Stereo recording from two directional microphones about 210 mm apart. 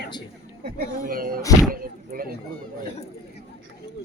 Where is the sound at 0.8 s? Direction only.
45° right (ahead or behind).